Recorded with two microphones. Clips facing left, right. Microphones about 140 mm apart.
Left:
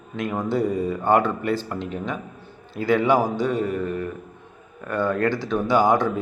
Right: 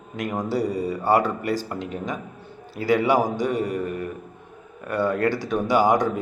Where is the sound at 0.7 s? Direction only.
35° right (ahead or behind).